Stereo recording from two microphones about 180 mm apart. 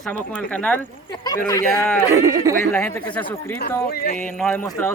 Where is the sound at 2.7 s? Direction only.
10° left (ahead or behind).